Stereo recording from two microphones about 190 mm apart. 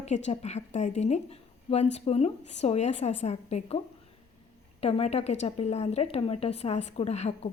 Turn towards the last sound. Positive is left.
turn(degrees=35)  # may be behind; listen again after turning